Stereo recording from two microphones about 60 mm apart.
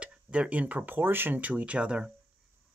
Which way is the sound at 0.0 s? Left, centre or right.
Centre.